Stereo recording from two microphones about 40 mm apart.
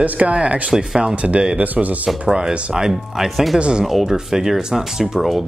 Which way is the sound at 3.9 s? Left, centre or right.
Centre.